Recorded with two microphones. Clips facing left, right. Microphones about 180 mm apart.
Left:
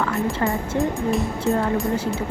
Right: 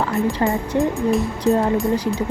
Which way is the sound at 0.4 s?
20° right (ahead or behind).